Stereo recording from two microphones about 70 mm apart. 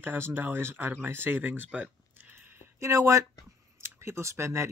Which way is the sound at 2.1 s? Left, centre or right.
Right.